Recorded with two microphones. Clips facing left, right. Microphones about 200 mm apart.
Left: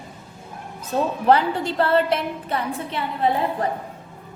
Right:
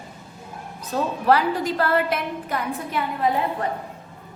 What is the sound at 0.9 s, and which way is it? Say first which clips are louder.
A woman's voice: left 2 dB; 25° left (ahead or behind).